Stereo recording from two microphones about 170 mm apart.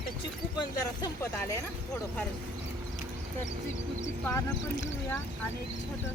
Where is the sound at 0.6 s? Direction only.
20° left (ahead or behind).